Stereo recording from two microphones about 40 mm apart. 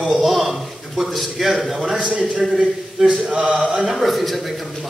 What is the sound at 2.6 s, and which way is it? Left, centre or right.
Speech, centre.